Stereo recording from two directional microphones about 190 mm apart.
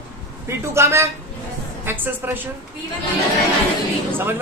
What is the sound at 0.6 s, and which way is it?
A man's voice, 15° right (ahead or behind).